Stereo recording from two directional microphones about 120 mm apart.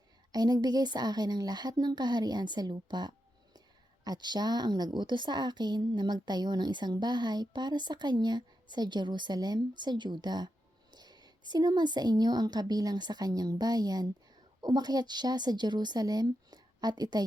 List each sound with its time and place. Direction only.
0.3 s a woman's voice: 35° right (ahead or behind)